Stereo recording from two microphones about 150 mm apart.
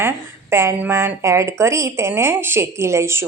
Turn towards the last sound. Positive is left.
turn(degrees=-20)  # may be behind; listen again after turning